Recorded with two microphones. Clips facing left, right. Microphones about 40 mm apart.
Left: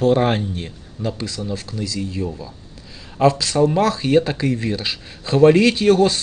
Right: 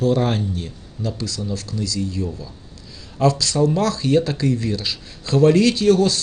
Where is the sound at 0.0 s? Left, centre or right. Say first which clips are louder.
Left 3 dB; left.